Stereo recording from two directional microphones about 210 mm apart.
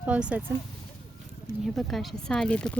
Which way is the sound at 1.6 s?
Centre (ahead or behind).